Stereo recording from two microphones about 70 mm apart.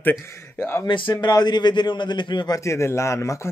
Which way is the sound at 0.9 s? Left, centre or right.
Left.